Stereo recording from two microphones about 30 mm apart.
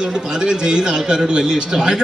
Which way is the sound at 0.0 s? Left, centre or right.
Right.